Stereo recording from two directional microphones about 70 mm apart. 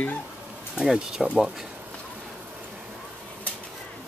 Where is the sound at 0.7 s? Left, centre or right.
Centre.